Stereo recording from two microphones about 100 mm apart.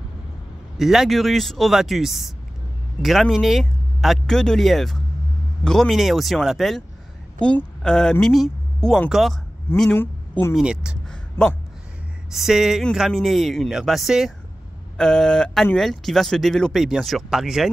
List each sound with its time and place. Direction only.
0.7 s speech: 5° right (ahead or behind)
9.8 s speech: 20° left (ahead or behind)
10.5 s speech: 10° right (ahead or behind)
11.1 s a sound: 10° left (ahead or behind)
12.3 s speech: 5° right (ahead or behind)